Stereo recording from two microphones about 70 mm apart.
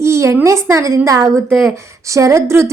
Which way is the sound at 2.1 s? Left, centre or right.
Right.